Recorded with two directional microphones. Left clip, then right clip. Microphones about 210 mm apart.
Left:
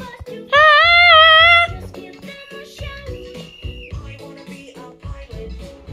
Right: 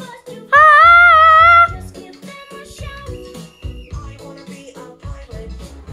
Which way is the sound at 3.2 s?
40° right (ahead or behind).